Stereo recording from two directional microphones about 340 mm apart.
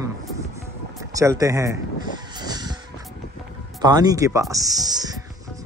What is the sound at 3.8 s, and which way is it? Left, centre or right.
Speech, centre.